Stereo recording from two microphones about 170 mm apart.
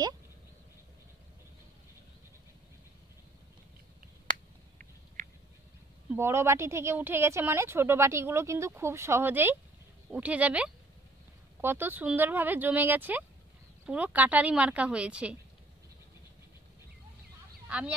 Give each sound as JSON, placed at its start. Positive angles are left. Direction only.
{"t": 6.0, "sound": "a woman's voice", "side_deg": -15}
{"t": 17.6, "sound": "speech", "side_deg": -5}